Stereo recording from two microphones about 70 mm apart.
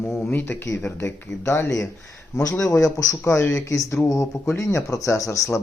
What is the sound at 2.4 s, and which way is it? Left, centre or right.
Speech, left.